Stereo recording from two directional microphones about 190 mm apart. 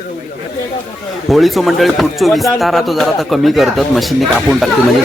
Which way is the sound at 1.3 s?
Centre (ahead or behind).